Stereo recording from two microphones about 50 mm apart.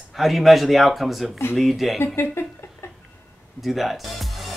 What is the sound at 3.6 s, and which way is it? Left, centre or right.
Speech, centre.